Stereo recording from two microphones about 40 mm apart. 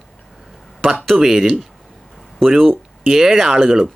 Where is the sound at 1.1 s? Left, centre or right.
Centre.